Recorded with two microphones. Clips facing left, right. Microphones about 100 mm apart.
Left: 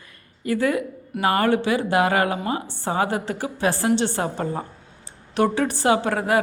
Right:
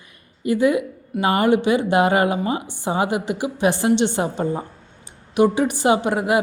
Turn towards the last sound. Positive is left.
turn(degrees=-15)  # may be behind; listen again after turning